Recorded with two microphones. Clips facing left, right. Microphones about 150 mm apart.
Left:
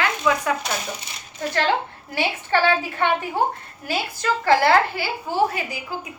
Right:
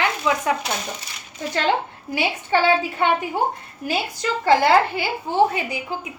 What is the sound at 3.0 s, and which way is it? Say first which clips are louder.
A woman's voice: left 2 dB; 15° right (ahead or behind).